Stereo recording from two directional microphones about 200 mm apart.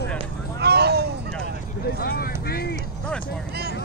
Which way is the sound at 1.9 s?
50° left (ahead or behind).